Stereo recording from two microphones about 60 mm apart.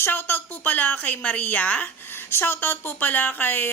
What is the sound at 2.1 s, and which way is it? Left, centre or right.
Speech, left.